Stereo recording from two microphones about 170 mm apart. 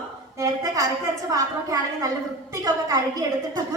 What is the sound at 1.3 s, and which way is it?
A woman's voice, 20° right (ahead or behind).